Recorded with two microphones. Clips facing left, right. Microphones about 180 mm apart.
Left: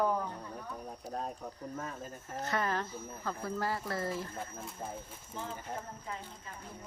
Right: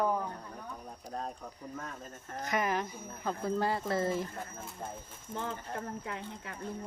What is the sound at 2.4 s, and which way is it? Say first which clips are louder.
Speech: right 2 dB; 15° right (ahead or behind).